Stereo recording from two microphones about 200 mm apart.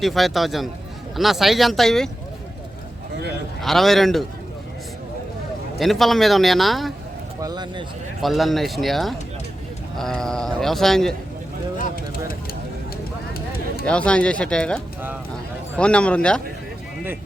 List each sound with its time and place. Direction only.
0.0 s a man's voice: centre (ahead or behind)
3.6 s a man's voice: centre (ahead or behind)
5.8 s a man's voice: centre (ahead or behind)
7.4 s speech: 20° right (ahead or behind)
8.2 s a man's voice: centre (ahead or behind)
13.3 s a sound: 50° left (ahead or behind)
13.8 s a man's voice: 5° left (ahead or behind)
15.8 s a man's voice: 5° left (ahead or behind)